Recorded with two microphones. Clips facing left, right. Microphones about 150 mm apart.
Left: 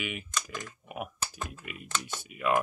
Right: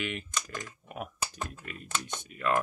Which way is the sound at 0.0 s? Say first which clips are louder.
Right 1 dB; 5° left (ahead or behind).